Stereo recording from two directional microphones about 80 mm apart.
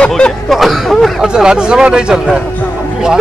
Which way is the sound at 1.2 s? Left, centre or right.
Centre.